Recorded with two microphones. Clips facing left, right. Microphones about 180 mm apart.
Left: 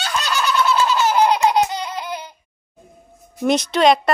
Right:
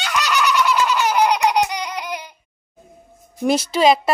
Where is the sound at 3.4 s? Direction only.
5° right (ahead or behind).